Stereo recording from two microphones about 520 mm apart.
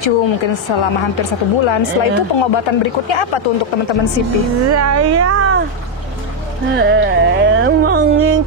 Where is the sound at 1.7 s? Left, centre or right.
Left.